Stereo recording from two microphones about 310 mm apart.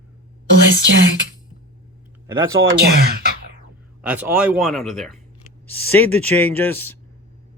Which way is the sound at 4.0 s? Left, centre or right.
Centre.